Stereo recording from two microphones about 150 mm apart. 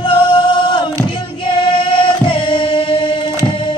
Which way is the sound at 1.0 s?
35° left (ahead or behind).